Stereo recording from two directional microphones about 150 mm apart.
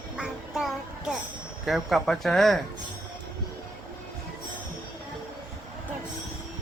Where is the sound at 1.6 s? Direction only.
Centre (ahead or behind).